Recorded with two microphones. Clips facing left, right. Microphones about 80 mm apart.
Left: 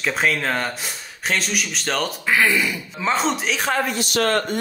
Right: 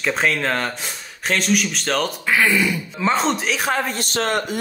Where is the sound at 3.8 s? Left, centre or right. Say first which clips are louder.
Left 1 dB; right.